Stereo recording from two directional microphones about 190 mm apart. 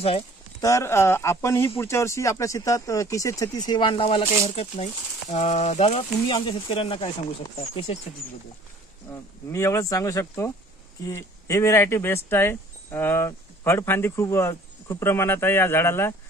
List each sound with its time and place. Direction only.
0.6 s speech: 15° left (ahead or behind); by 8.0 s 30° left (ahead or behind)
9.5 s speech: 15° left (ahead or behind)